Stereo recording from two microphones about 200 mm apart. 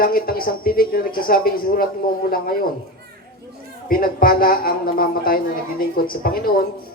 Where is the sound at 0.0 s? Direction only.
45° left (ahead or behind).